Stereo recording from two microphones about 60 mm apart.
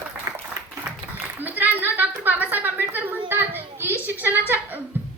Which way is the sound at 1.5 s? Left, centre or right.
Right.